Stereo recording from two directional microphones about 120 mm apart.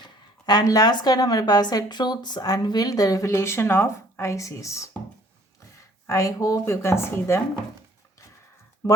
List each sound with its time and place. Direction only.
0.0 s speech: 35° left (ahead or behind)
6.1 s a woman's voice: 25° left (ahead or behind)
8.8 s speech: 25° left (ahead or behind)